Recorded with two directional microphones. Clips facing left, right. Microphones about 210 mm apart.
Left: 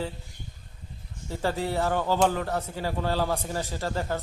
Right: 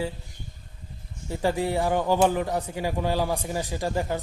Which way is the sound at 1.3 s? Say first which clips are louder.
Right 3 dB; 15° right (ahead or behind).